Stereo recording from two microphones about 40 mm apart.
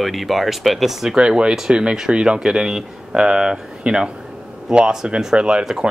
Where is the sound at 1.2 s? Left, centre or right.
Right.